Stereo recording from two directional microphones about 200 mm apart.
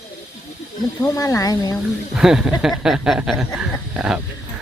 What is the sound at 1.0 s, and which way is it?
Speech, 15° left (ahead or behind).